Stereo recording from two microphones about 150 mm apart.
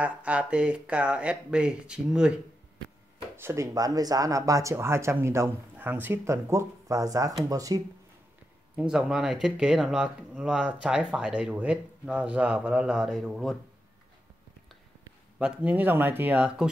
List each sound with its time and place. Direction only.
0.0 s speech: 10° right (ahead or behind)
3.3 s speech: 20° right (ahead or behind)
8.7 s speech: 5° right (ahead or behind)
15.3 s speech: 5° right (ahead or behind)